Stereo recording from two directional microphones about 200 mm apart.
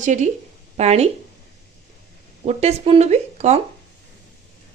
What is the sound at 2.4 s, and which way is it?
Speech, 35° right (ahead or behind).